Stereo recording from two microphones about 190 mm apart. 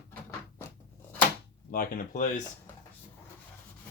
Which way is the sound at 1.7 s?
50° left (ahead or behind).